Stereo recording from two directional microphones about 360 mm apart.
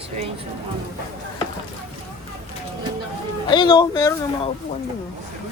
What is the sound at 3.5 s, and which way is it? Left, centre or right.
Speech, centre.